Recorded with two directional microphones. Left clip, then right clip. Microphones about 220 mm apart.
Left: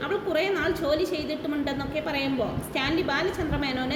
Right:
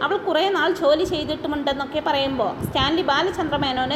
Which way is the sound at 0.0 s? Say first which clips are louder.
Right 6 dB; 10° right (ahead or behind).